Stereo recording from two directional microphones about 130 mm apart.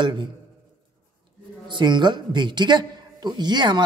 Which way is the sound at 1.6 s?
35° right (ahead or behind).